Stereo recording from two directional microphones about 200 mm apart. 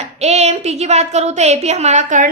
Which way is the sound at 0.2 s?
30° right (ahead or behind).